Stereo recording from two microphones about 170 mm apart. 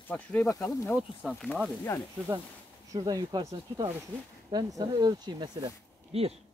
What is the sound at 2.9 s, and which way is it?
Speech, 20° right (ahead or behind).